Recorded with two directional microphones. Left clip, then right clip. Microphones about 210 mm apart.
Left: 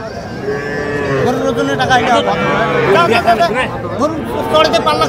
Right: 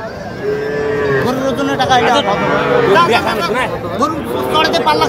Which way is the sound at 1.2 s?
25° left (ahead or behind).